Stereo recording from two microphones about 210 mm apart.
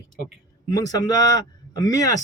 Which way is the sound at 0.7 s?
20° left (ahead or behind).